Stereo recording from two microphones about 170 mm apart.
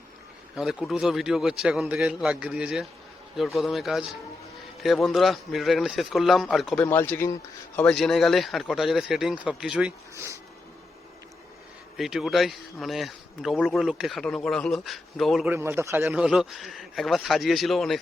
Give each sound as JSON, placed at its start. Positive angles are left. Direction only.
{"t": 0.5, "sound": "speech", "side_deg": -5}
{"t": 6.8, "sound": "speech", "side_deg": 10}
{"t": 10.2, "sound": "a man's voice", "side_deg": -15}
{"t": 11.9, "sound": "speech", "side_deg": 0}
{"t": 15.4, "sound": "a man's voice", "side_deg": -15}
{"t": 16.0, "sound": "speech", "side_deg": -5}